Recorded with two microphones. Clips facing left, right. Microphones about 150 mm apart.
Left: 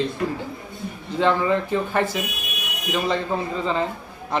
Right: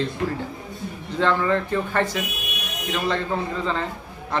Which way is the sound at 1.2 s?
15° left (ahead or behind).